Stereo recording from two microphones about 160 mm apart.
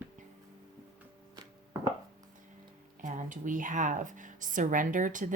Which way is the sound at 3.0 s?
50° right (ahead or behind).